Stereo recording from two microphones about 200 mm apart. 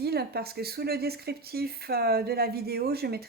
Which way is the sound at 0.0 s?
55° right (ahead or behind).